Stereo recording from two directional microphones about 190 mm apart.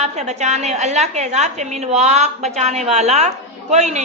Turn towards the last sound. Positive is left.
turn(degrees=-35)  # may be behind; listen again after turning